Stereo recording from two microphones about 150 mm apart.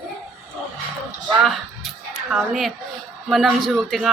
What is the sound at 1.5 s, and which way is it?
A man's voice, centre (ahead or behind).